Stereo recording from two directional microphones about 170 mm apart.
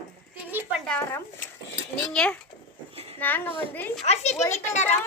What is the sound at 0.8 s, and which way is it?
A woman's voice, 10° left (ahead or behind).